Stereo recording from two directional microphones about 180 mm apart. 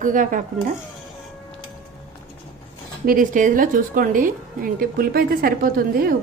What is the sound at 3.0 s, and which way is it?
A woman's voice, 50° right (ahead or behind).